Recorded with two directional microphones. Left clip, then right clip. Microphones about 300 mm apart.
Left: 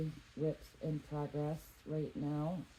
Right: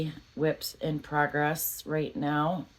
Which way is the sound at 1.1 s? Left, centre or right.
Right.